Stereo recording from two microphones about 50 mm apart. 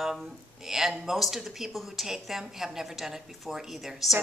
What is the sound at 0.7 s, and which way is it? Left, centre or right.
A woman's voice, centre.